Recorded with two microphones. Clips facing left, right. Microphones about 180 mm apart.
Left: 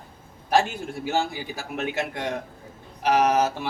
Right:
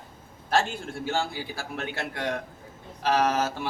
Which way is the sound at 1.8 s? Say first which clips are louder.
Left 7 dB; 20° left (ahead or behind).